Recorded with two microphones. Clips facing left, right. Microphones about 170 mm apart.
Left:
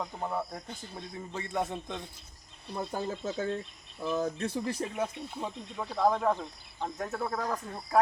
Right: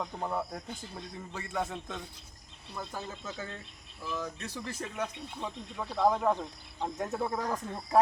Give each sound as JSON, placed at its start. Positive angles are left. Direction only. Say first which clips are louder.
{"t": 0.0, "sound": "speech", "louder": "even", "side_deg": 5}
{"t": 2.7, "sound": "speech", "louder": "left 6 dB", "side_deg": 30}
{"t": 4.4, "sound": "speech", "louder": "left 7 dB", "side_deg": 50}
{"t": 4.9, "sound": "speech", "louder": "left 3 dB", "side_deg": 10}